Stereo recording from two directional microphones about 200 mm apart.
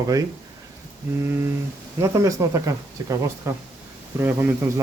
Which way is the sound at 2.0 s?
15° right (ahead or behind).